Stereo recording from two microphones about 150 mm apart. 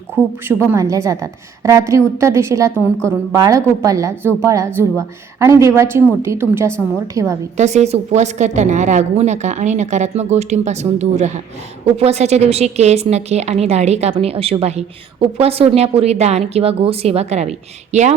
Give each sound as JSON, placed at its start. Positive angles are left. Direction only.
{"t": 0.4, "sound": "a woman's voice", "side_deg": -20}
{"t": 7.5, "sound": "a woman's voice", "side_deg": -50}